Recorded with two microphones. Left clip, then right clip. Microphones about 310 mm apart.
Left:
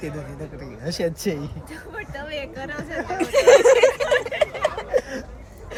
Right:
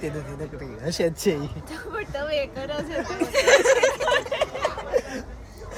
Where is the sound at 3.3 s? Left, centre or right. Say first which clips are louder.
Left 5 dB; left.